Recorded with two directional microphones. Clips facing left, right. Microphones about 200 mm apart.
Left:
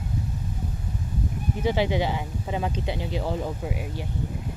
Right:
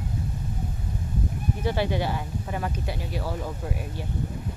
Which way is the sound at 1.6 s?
15° left (ahead or behind).